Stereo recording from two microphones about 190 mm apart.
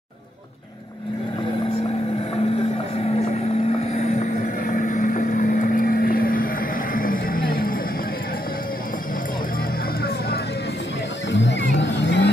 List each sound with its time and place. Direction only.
3.9 s vehicle: 35° left (ahead or behind)
11.3 s vehicle: 70° left (ahead or behind)